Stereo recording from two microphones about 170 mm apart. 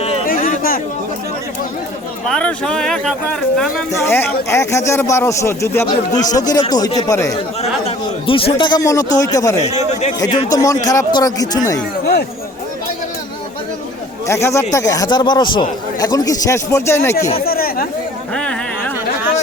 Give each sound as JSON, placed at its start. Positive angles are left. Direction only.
{"t": 0.3, "sound": "a sound", "side_deg": 55}
{"t": 2.2, "sound": "speech", "side_deg": 5}
{"t": 3.9, "sound": "speech", "side_deg": 15}
{"t": 7.9, "sound": "speech", "side_deg": 35}
{"t": 14.4, "sound": "speech", "side_deg": 20}
{"t": 17.4, "sound": "speech", "side_deg": 60}